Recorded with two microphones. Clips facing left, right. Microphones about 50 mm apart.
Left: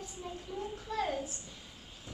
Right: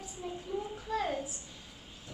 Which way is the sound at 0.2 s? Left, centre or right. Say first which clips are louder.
Right 4 dB; centre.